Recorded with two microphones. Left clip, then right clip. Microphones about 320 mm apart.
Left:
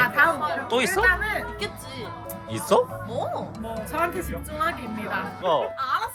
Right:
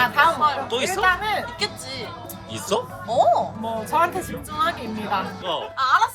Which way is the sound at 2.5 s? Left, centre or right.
Centre.